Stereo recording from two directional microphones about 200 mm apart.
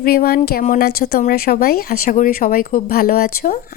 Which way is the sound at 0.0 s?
50° left (ahead or behind).